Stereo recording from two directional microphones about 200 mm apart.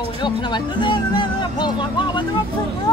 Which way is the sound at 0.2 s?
25° left (ahead or behind).